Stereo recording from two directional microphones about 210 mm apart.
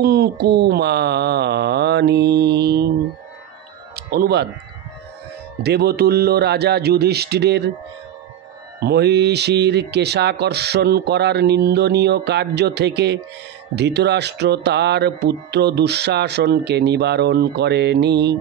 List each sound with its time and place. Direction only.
0.0 s speech: 50° right (ahead or behind)
3.9 s music: 50° right (ahead or behind)
5.6 s speech: 50° right (ahead or behind)
8.7 s speech: 50° right (ahead or behind)